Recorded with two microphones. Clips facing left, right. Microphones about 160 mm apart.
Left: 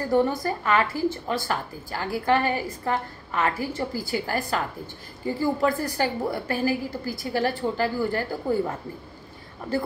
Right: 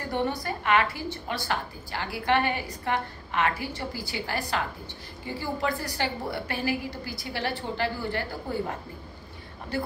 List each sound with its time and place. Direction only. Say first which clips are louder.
0.1 s a woman's voice: left 6 dB; 40° left (ahead or behind)